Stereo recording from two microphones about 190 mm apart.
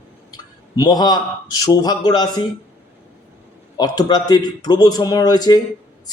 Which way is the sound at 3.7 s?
20° left (ahead or behind).